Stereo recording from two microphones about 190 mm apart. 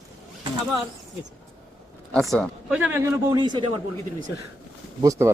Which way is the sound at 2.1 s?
5° left (ahead or behind).